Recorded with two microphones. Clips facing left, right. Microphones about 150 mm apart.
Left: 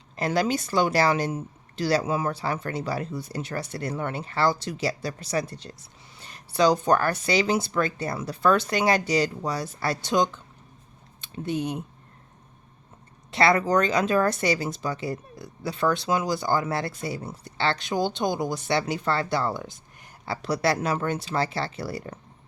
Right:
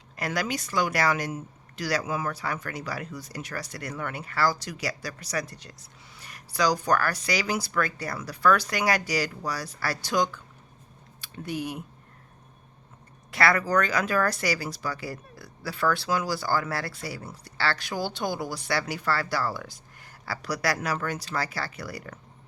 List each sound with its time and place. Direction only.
0.2 s speech: 25° left (ahead or behind)
13.3 s speech: 25° left (ahead or behind)